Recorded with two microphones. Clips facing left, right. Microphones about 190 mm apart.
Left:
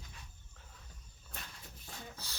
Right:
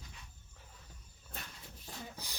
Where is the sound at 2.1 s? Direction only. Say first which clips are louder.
Right 2 dB; 15° right (ahead or behind).